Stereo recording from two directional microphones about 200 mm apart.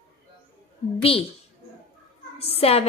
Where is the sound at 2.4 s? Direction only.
30° left (ahead or behind).